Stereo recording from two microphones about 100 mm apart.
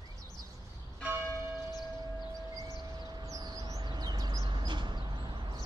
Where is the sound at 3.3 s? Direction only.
35° right (ahead or behind); by 5.6 s 50° right (ahead or behind).